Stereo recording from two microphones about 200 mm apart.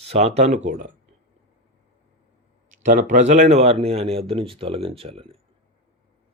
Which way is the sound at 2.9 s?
35° right (ahead or behind).